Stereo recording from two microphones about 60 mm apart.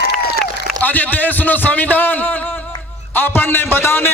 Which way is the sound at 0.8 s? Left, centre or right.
Left.